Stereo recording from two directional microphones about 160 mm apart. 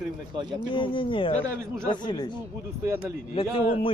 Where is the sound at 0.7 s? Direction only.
30° left (ahead or behind).